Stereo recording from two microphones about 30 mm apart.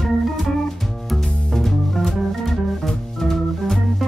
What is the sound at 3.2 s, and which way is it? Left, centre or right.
Organ, centre.